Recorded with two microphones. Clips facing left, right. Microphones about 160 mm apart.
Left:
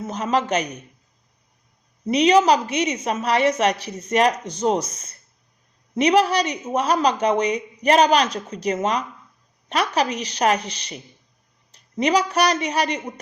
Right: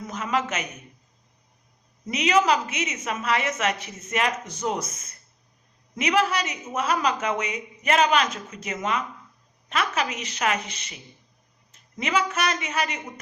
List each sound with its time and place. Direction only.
0.0 s a woman's voice: 30° left (ahead or behind)
2.0 s a woman's voice: 30° left (ahead or behind)